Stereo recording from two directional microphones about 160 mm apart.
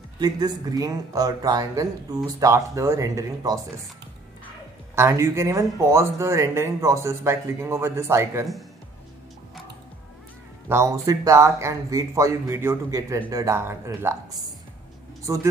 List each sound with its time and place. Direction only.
0.2 s speech: 25° right (ahead or behind)
4.9 s speech: 15° right (ahead or behind)
10.7 s speech: 20° right (ahead or behind)
15.2 s speech: 20° right (ahead or behind)